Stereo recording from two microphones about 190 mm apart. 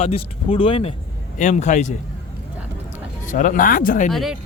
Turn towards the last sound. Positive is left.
turn(degrees=0)  # may be behind; listen again after turning